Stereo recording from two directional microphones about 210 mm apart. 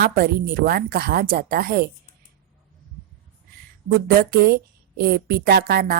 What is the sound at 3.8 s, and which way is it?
A woman's voice, 45° right (ahead or behind).